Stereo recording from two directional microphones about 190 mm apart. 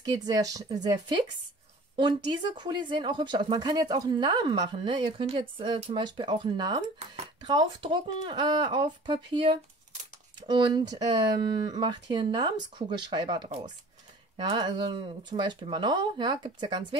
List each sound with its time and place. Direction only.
0.0 s speech: 20° right (ahead or behind)